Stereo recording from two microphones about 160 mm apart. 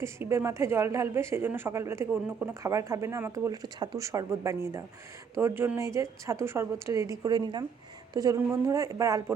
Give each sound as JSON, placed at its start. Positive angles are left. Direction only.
{"t": 0.0, "sound": "speech", "side_deg": -15}